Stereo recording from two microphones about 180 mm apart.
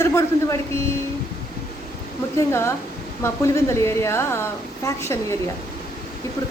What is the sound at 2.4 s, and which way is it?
A woman's voice, 15° left (ahead or behind).